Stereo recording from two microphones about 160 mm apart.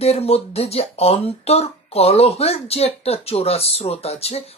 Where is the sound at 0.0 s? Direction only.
40° left (ahead or behind).